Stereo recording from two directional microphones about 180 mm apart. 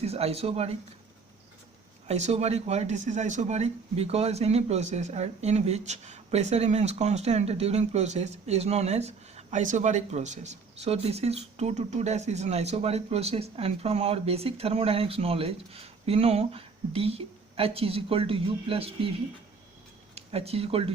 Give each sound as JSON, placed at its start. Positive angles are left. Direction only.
{"t": 0.0, "sound": "speech", "side_deg": -35}
{"t": 2.0, "sound": "speech", "side_deg": -40}
{"t": 20.1, "sound": "speech", "side_deg": -35}